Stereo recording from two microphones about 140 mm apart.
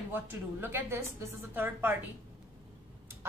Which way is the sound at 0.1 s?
15° right (ahead or behind).